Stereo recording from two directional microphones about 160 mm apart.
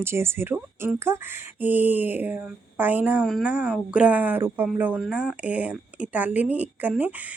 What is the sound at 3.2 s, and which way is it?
Speech, centre (ahead or behind).